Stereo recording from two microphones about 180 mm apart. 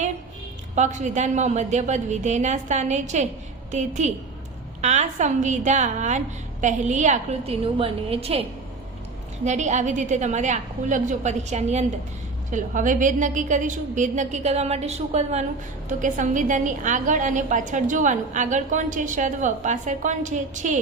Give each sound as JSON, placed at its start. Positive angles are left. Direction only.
{"t": 0.8, "sound": "a woman's voice", "side_deg": -40}